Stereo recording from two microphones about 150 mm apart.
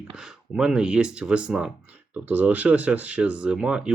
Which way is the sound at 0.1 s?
5° right (ahead or behind).